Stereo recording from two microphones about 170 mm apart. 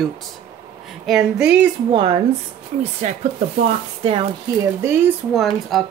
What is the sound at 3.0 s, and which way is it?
Speech, 45° right (ahead or behind).